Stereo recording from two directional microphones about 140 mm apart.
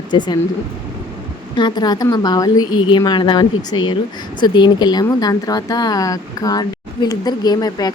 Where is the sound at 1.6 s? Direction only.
30° left (ahead or behind).